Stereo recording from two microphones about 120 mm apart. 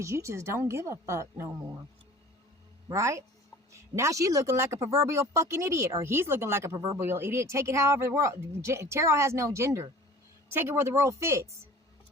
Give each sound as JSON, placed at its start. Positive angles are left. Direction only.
{"t": 0.0, "sound": "speech", "side_deg": -25}
{"t": 2.9, "sound": "speech", "side_deg": -25}